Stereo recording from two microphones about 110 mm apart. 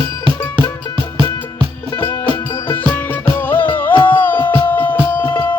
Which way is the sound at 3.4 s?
20° left (ahead or behind).